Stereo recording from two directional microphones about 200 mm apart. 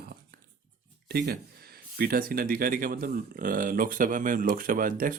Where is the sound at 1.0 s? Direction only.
55° right (ahead or behind).